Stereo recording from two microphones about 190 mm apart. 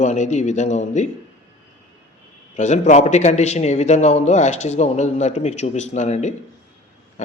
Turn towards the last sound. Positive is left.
turn(degrees=35)  # may be behind; listen again after turning